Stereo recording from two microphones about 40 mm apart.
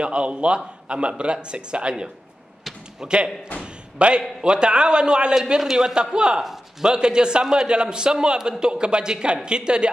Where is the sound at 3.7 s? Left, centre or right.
Right.